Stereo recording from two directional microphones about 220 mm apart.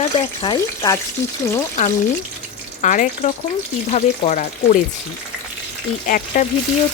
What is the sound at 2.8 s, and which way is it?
A woman's voice, 35° left (ahead or behind).